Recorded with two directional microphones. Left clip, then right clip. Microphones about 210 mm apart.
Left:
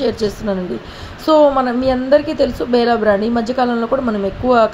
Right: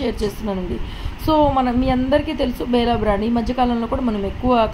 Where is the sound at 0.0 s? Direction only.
20° left (ahead or behind).